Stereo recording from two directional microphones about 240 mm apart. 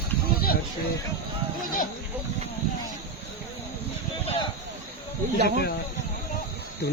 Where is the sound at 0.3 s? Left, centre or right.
Left.